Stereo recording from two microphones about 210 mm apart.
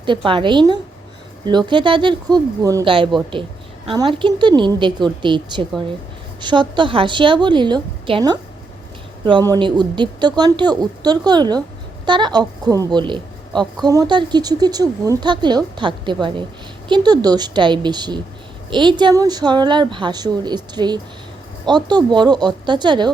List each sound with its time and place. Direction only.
0.3 s a woman's voice: 25° right (ahead or behind)